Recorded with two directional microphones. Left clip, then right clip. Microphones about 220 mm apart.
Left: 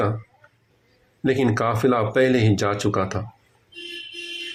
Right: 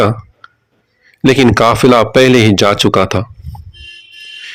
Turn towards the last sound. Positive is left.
turn(degrees=-40)  # may be behind; listen again after turning